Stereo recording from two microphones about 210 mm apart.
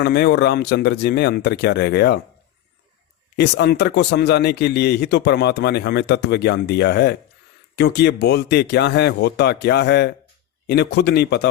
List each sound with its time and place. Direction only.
0.0 s speech: 50° left (ahead or behind)
3.3 s speech: 50° left (ahead or behind)